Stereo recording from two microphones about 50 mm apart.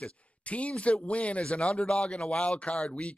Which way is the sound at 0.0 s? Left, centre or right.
Left.